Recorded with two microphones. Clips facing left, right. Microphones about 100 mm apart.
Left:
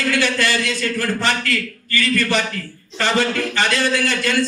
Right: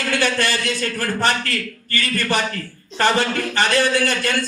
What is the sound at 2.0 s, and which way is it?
Speech, 20° right (ahead or behind).